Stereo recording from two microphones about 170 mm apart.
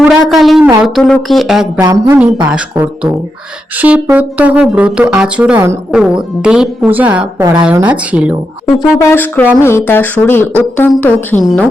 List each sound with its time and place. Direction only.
0.1 s speech: centre (ahead or behind)
1.8 s speech: 20° right (ahead or behind)
2.5 s speech: 10° right (ahead or behind)
9.0 s speech: 15° left (ahead or behind); by 11.7 s centre (ahead or behind)